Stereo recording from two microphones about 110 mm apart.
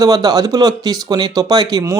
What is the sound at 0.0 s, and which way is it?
Speech, 35° right (ahead or behind).